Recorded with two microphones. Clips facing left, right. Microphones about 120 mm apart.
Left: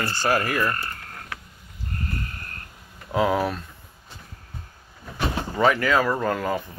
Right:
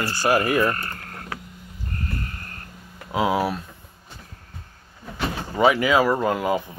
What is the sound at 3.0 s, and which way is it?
Speech, 5° right (ahead or behind).